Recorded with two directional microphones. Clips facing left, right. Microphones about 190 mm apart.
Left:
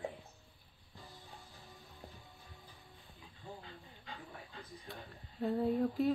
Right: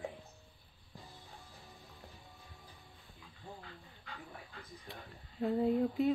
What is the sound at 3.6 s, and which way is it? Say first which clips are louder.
Dog: even; 25° left (ahead or behind).